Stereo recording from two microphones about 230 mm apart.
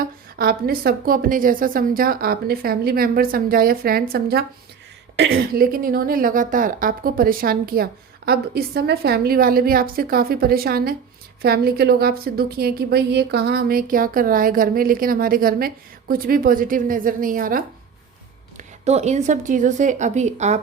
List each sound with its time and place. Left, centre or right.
0.3 s a woman's voice: right